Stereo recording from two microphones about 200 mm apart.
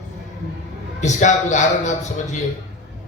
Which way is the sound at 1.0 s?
35° left (ahead or behind).